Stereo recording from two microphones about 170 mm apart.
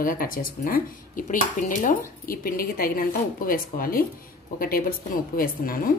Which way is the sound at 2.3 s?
60° left (ahead or behind).